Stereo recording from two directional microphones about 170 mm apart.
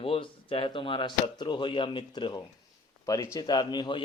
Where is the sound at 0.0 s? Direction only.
35° left (ahead or behind).